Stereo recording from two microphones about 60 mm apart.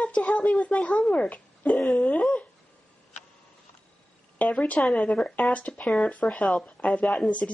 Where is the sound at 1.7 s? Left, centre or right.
Centre.